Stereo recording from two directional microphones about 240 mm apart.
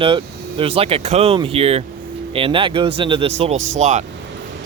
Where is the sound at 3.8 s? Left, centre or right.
Right.